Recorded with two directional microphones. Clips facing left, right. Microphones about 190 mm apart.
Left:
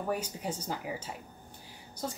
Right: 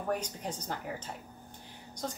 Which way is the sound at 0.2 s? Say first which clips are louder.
Left 2 dB; 10° left (ahead or behind).